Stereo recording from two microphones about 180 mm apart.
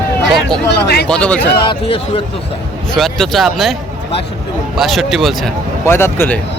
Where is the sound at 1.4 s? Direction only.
65° left (ahead or behind).